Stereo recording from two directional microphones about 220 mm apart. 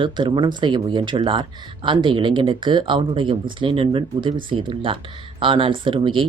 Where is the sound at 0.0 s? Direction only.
20° right (ahead or behind).